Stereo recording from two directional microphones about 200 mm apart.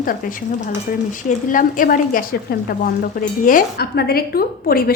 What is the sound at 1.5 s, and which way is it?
Speech, 40° left (ahead or behind).